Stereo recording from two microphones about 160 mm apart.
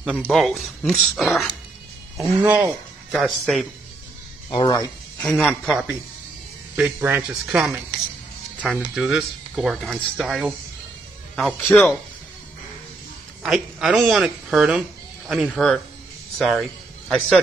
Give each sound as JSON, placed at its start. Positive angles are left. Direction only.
{"t": 0.2, "sound": "speech", "side_deg": 5}
{"t": 2.2, "sound": "speech", "side_deg": -10}
{"t": 3.1, "sound": "speech", "side_deg": 5}
{"t": 4.5, "sound": "speech", "side_deg": 30}
{"t": 5.2, "sound": "speech", "side_deg": 10}
{"t": 5.7, "sound": "speech", "side_deg": -5}
{"t": 13.4, "sound": "speech", "side_deg": 0}